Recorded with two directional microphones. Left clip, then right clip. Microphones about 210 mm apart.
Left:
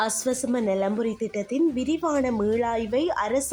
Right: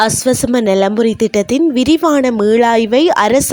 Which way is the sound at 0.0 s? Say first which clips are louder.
Right 13 dB; 40° right (ahead or behind).